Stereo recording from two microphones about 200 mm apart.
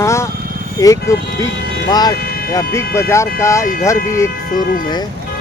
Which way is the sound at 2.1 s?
50° left (ahead or behind).